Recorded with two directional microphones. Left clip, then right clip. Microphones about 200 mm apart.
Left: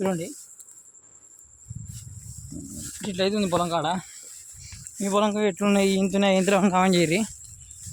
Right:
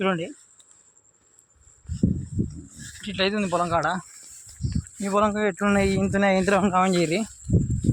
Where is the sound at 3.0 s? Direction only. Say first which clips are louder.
Even; 10° left (ahead or behind).